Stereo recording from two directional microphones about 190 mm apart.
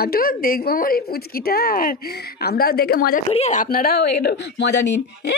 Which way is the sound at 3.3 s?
35° left (ahead or behind).